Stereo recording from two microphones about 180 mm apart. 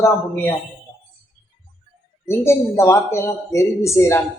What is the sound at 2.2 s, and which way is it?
Speech, 15° left (ahead or behind).